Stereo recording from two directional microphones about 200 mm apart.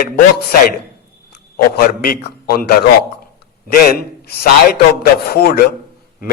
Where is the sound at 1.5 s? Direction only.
50° left (ahead or behind).